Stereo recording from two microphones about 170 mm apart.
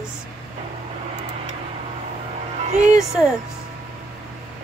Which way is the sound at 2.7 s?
45° right (ahead or behind).